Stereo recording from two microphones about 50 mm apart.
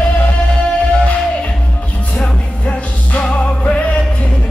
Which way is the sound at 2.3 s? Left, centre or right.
Left.